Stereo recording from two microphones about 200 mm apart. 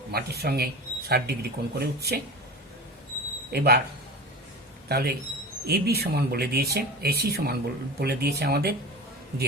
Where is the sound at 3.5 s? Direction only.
55° right (ahead or behind).